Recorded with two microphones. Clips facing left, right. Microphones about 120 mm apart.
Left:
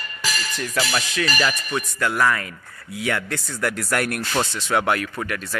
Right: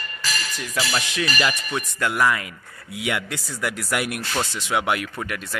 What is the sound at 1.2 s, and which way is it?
Speech, 20° right (ahead or behind).